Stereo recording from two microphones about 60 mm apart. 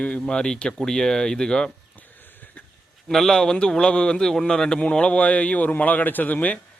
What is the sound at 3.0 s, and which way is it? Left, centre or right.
A man's voice, centre.